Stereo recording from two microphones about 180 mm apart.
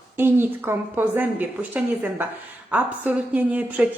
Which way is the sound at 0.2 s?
10° right (ahead or behind).